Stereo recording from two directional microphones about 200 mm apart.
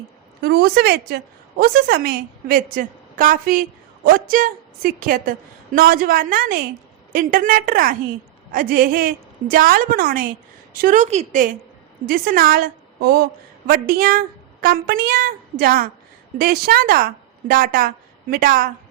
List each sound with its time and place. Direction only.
0.4 s a woman's voice: 50° right (ahead or behind)